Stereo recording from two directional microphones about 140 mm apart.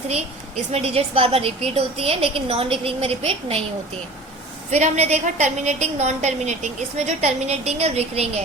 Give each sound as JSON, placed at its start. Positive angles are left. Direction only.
{"t": 0.7, "sound": "a woman's voice", "side_deg": -45}
{"t": 4.7, "sound": "a woman's voice", "side_deg": -50}